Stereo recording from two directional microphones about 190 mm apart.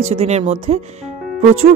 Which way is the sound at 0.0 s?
30° right (ahead or behind).